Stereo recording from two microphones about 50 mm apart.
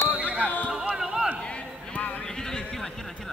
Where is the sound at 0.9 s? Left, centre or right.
Centre.